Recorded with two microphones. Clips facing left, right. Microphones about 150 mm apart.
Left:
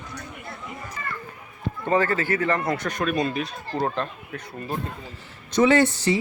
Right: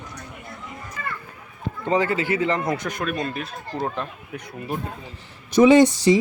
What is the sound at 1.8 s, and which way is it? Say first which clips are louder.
Speech: right 1 dB; 15° right (ahead or behind).